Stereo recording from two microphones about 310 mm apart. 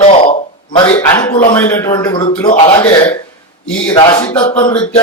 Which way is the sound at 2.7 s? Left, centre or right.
Centre.